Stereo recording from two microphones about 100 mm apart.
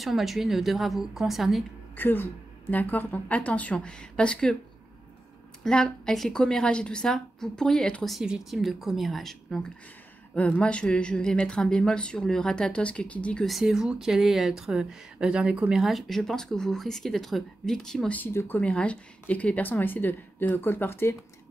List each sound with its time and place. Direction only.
0.0 s speech: centre (ahead or behind)
2.0 s a woman's voice: 20° left (ahead or behind)
5.6 s a woman's voice: 10° left (ahead or behind)
18.1 s a woman's voice: 20° left (ahead or behind)
18.6 s a woman's voice: 10° left (ahead or behind)